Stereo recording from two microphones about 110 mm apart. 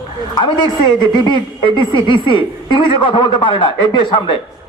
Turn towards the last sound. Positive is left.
turn(degrees=45)  # may be behind; listen again after turning